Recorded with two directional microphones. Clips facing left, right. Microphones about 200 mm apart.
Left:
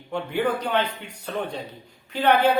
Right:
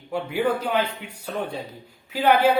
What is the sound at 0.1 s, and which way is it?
A man's voice, 10° right (ahead or behind).